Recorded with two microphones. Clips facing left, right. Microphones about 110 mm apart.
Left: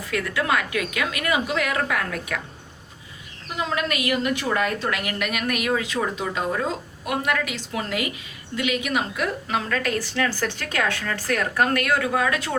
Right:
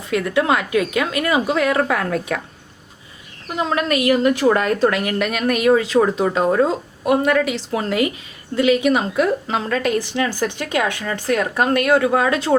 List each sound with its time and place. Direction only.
0.0 s a woman's voice: 25° right (ahead or behind)
3.6 s speech: 35° right (ahead or behind)
6.2 s speech: 45° right (ahead or behind)
7.0 s a woman's voice: 30° right (ahead or behind)